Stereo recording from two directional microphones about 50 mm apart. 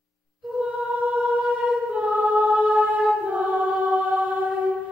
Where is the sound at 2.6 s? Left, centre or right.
Right.